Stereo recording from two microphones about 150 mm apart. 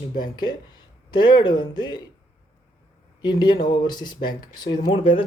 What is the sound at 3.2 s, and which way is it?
Speech, 30° left (ahead or behind).